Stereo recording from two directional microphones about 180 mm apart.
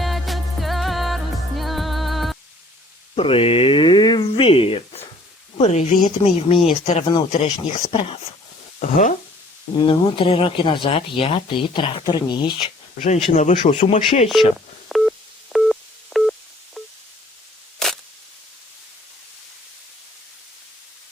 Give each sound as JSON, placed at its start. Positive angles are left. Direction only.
{"t": 0.0, "sound": "music", "side_deg": 0}
{"t": 3.2, "sound": "speech", "side_deg": 30}
{"t": 8.8, "sound": "speech", "side_deg": 45}
{"t": 9.7, "sound": "speech", "side_deg": 30}
{"t": 13.3, "sound": "speech", "side_deg": 40}
{"t": 14.8, "sound": "telephone dialing", "side_deg": 0}
{"t": 16.8, "sound": "a sound", "side_deg": 0}